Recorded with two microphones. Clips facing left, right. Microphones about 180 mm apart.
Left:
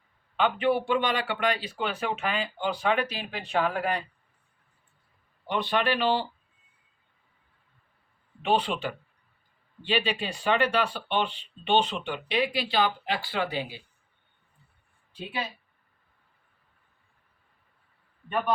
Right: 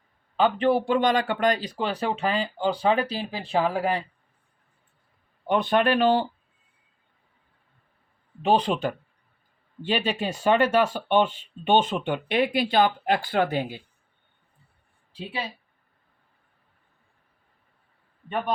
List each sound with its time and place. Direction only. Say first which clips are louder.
0.3 s speech: right 3 dB; 35° right (ahead or behind)
5.5 s speech: right 5 dB; 50° right (ahead or behind)
8.4 s speech: right 4 dB; 40° right (ahead or behind)
15.1 s speech: right 1 dB; 30° right (ahead or behind)